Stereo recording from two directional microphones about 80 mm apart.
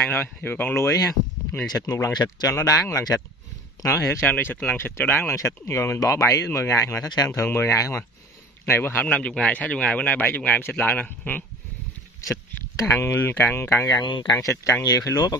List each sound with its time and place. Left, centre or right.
0.0 s speech: left
0.8 s speech: left
5.3 s speech: left
7.7 s speech: left
8.6 s speech: left
9.0 s speech: centre
12.2 s a sound: left
13.0 s speech: left
13.8 s speech: left
14.3 s speech: left